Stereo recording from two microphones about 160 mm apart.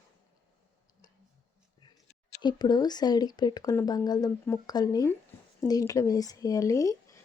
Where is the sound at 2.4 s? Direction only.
25° left (ahead or behind).